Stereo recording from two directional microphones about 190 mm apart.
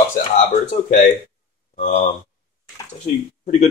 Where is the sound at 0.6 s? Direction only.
45° left (ahead or behind).